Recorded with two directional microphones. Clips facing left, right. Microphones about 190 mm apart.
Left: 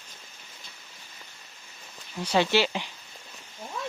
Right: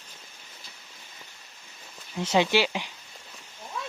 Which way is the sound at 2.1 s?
20° right (ahead or behind).